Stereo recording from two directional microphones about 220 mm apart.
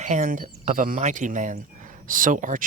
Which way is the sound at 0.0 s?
35° right (ahead or behind).